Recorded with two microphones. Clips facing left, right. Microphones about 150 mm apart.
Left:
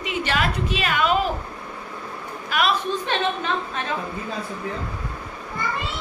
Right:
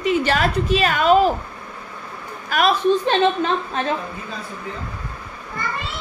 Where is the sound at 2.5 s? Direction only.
40° right (ahead or behind).